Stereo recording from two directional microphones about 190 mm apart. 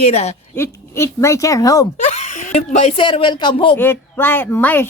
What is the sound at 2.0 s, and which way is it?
Speech, 40° left (ahead or behind).